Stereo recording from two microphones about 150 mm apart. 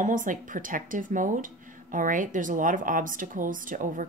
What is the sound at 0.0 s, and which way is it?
Speech, 60° right (ahead or behind).